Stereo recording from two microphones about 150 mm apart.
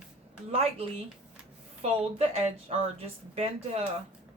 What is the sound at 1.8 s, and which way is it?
Speech, 45° right (ahead or behind).